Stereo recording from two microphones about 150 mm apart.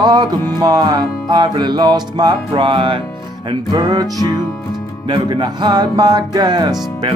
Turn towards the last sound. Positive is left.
turn(degrees=-30)  # may be behind; listen again after turning